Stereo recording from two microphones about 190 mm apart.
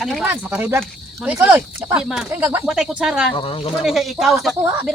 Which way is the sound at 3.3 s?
30° left (ahead or behind).